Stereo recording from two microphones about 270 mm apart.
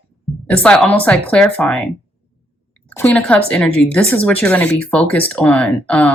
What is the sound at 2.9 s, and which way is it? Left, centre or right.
A woman's voice, centre.